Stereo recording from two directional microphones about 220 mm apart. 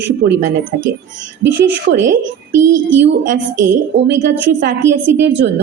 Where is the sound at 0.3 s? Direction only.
55° right (ahead or behind).